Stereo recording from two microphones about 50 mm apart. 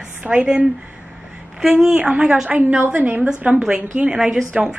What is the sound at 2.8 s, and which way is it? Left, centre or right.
A woman's voice, right.